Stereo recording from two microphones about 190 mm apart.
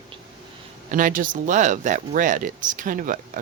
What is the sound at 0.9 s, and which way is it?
Speech, 45° right (ahead or behind).